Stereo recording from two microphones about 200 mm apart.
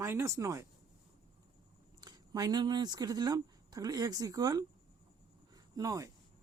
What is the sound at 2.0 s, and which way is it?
Speech, 20° right (ahead or behind).